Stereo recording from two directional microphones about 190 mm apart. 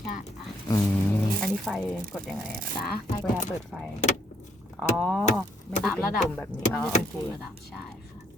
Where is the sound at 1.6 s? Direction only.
Centre (ahead or behind).